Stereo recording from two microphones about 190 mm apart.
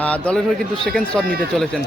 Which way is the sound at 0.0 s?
5° left (ahead or behind).